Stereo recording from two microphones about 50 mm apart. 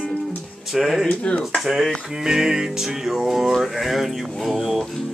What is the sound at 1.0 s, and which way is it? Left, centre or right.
Speech, left.